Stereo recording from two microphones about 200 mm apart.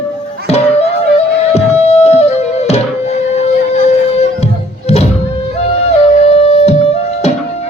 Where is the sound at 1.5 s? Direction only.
30° left (ahead or behind).